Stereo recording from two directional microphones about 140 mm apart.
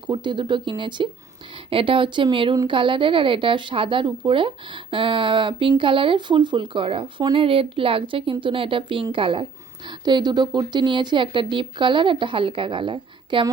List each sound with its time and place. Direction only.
0.1 s speech: 35° right (ahead or behind)